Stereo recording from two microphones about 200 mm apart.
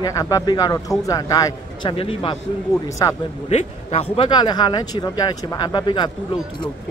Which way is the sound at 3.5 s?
35° left (ahead or behind).